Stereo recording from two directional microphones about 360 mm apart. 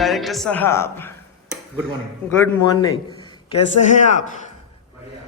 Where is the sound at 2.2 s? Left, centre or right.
Centre.